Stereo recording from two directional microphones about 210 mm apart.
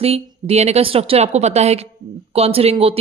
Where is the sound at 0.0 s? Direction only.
30° right (ahead or behind).